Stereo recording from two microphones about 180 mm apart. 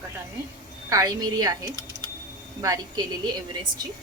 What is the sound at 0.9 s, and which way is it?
Speech, 20° right (ahead or behind).